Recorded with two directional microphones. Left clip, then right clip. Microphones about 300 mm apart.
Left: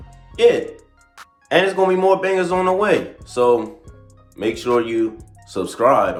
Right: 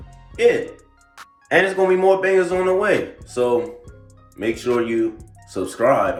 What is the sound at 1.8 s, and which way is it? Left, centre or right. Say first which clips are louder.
Speech: even; centre.